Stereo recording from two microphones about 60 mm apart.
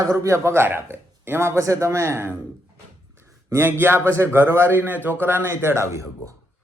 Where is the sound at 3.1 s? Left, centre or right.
Right.